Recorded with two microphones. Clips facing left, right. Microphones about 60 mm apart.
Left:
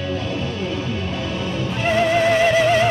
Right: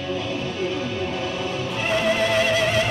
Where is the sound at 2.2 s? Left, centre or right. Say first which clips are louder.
Left 5 dB; left.